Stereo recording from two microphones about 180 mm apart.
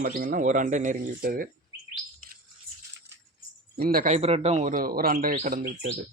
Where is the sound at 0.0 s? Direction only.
50° right (ahead or behind).